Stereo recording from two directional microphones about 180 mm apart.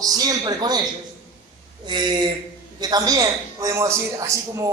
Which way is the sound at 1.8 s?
25° right (ahead or behind).